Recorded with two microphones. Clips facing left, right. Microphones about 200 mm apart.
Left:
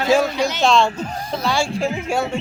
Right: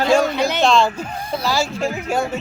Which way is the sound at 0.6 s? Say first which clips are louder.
Even; centre (ahead or behind).